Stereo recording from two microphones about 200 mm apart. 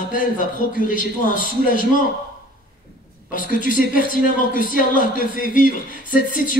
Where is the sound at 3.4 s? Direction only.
45° left (ahead or behind).